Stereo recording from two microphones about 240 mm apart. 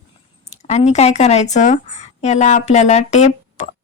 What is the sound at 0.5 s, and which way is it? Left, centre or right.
Speech, left.